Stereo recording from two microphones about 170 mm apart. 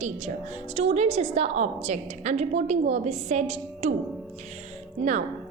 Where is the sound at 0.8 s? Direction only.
40° right (ahead or behind).